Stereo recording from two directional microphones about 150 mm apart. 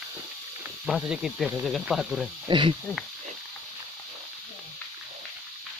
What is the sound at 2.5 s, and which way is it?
Speech, 30° right (ahead or behind).